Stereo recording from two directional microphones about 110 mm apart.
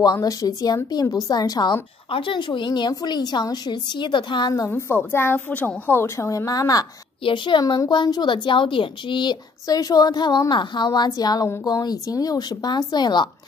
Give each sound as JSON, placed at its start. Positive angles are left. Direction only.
{"t": 0.0, "sound": "a woman's voice", "side_deg": 35}
{"t": 2.0, "sound": "a woman's voice", "side_deg": 50}
{"t": 4.6, "sound": "a woman's voice", "side_deg": 20}
{"t": 7.2, "sound": "a woman's voice", "side_deg": 45}